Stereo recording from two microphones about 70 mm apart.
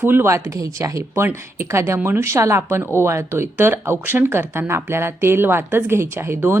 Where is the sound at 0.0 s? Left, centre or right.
Right.